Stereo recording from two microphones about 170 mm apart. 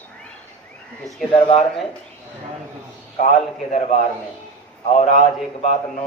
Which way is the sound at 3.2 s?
45° left (ahead or behind).